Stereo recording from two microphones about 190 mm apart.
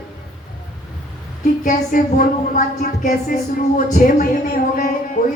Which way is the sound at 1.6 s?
45° left (ahead or behind).